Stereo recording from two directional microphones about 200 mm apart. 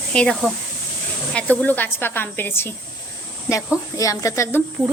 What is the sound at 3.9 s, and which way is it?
Speech, 15° left (ahead or behind).